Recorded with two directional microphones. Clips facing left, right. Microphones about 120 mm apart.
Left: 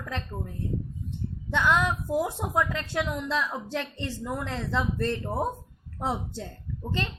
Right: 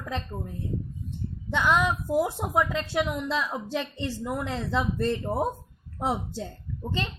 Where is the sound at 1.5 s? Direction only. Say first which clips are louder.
Right 1 dB; 15° right (ahead or behind).